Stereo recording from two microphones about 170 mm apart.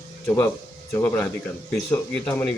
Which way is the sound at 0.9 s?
15° left (ahead or behind).